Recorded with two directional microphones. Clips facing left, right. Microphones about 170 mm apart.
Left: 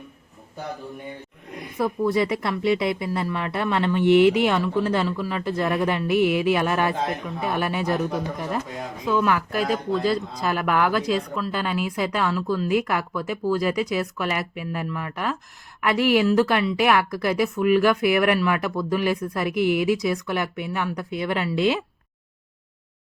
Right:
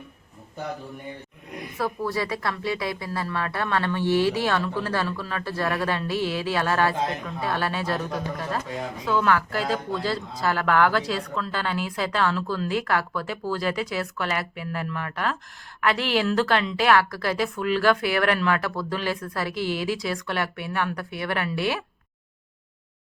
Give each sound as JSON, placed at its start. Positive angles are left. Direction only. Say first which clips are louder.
{"t": 1.8, "sound": "speech", "louder": "left 5 dB", "side_deg": 20}